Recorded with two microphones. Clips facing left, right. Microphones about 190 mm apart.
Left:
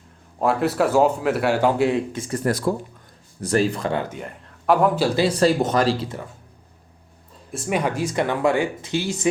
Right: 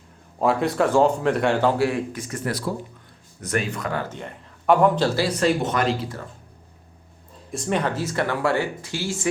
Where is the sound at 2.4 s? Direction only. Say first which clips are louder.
Left 5 dB; 45° left (ahead or behind).